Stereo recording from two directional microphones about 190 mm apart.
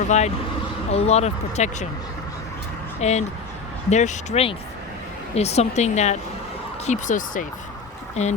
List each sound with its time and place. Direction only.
0.9 s speech: 35° left (ahead or behind)
3.0 s speech: 35° left (ahead or behind)